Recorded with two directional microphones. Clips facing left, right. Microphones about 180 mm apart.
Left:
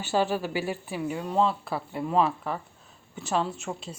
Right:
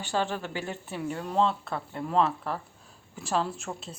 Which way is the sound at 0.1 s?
10° left (ahead or behind).